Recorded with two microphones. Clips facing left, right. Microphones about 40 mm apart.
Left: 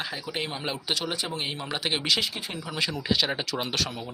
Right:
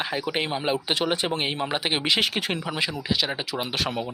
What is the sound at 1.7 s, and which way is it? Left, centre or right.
Speech, right.